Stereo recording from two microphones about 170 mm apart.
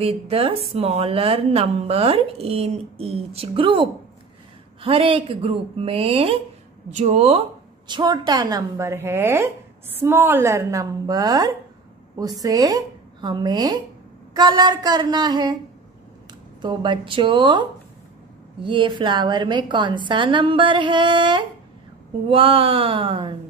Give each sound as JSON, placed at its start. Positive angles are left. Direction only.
{"t": 0.0, "sound": "a woman's voice", "side_deg": -35}
{"t": 7.9, "sound": "a woman's voice", "side_deg": -25}
{"t": 16.6, "sound": "a woman's voice", "side_deg": -30}